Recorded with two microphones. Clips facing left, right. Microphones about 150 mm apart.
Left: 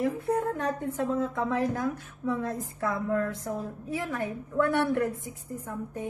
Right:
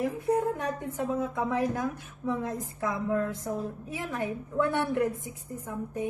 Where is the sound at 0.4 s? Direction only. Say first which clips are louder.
Even; 10° right (ahead or behind).